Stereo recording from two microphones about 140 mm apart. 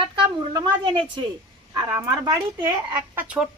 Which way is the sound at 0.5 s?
35° right (ahead or behind).